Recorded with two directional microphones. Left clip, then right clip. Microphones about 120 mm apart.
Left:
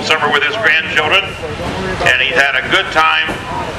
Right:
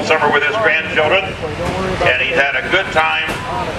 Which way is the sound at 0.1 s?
45° left (ahead or behind).